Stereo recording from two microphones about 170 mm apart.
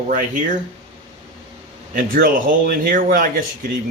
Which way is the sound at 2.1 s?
60° right (ahead or behind).